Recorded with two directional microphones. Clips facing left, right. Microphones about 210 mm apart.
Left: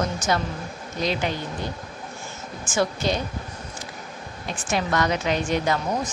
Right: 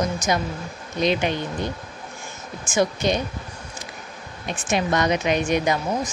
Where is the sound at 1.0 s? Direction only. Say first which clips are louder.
Right 4 dB; 20° right (ahead or behind).